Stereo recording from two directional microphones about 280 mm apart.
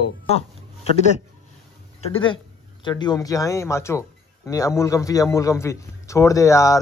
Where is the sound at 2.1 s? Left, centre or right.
Centre.